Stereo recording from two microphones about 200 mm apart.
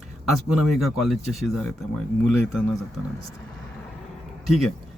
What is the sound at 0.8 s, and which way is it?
Speech, centre (ahead or behind).